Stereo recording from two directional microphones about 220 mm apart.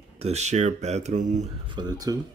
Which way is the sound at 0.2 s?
30° right (ahead or behind).